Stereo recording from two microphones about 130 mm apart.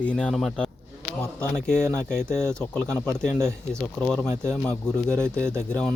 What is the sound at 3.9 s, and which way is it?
Speech, 5° left (ahead or behind).